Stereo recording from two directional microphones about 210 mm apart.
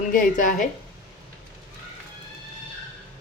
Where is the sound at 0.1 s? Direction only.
40° left (ahead or behind).